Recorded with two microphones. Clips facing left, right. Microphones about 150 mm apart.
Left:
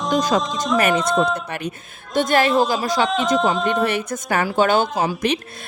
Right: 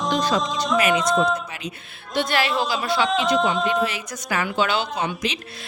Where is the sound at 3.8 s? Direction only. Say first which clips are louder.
Left 5 dB; 55° left (ahead or behind).